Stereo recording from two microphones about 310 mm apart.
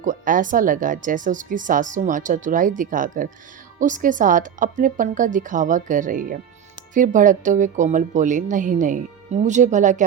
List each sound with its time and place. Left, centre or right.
0.0 s speech: right